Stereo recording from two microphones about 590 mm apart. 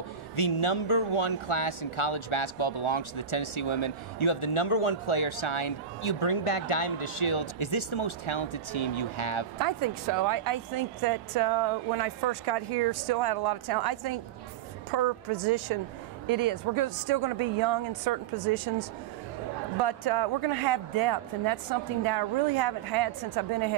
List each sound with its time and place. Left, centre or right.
0.4 s speech: left
9.6 s a woman's voice: right